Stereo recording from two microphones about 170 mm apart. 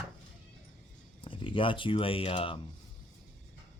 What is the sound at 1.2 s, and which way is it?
Speech, 30° left (ahead or behind).